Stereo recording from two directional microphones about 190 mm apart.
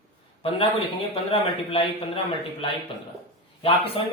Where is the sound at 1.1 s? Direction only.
30° left (ahead or behind).